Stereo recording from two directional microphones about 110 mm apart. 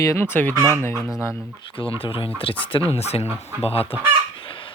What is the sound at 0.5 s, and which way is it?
Speech, 25° right (ahead or behind).